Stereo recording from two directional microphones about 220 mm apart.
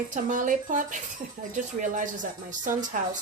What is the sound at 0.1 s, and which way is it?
A woman's voice, 35° right (ahead or behind).